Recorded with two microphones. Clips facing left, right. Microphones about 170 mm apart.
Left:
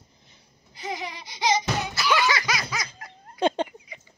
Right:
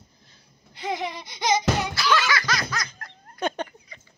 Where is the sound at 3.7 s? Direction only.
15° left (ahead or behind).